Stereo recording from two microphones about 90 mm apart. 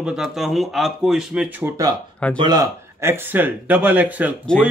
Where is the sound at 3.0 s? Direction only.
25° right (ahead or behind).